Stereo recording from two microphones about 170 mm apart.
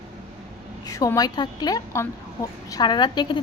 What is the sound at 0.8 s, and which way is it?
Speech, 20° left (ahead or behind).